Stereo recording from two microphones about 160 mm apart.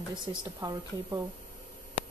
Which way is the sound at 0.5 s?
20° right (ahead or behind).